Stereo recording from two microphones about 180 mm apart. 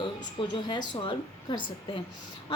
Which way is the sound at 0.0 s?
25° left (ahead or behind).